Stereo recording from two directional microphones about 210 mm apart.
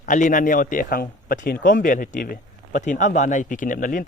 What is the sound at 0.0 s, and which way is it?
Speech, 40° left (ahead or behind).